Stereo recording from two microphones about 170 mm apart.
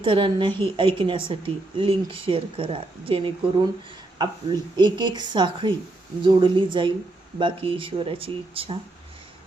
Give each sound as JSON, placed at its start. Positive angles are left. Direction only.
{"t": 0.0, "sound": "a woman's voice", "side_deg": -30}